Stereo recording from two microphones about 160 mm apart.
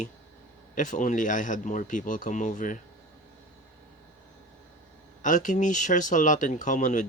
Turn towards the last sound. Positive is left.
turn(degrees=55)  # may be behind; listen again after turning